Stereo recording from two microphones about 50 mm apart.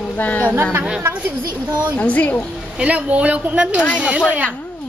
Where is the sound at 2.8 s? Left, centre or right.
Right.